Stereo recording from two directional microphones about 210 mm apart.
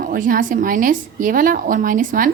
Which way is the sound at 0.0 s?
40° right (ahead or behind).